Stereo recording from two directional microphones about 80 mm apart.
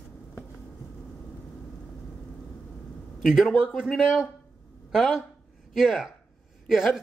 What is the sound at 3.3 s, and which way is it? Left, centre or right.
A man's voice, centre.